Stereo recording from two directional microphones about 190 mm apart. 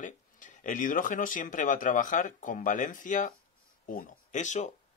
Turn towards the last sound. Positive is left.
turn(degrees=40)  # may be behind; listen again after turning